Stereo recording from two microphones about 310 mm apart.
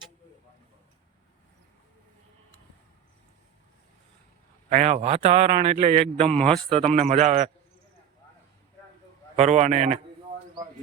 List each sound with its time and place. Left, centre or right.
4.7 s a man's voice: right
6.3 s speech: centre
6.7 s a man's voice: centre
9.3 s a man's voice: right